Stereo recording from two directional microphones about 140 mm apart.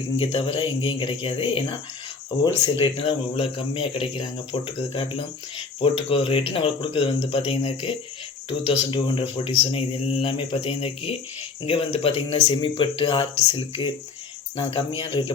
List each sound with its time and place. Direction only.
0.2 s speech: 40° left (ahead or behind)